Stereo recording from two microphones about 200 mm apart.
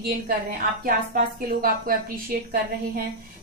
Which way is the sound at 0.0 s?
45° right (ahead or behind).